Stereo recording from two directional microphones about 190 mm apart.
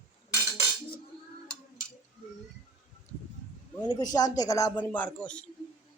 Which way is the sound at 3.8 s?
20° left (ahead or behind).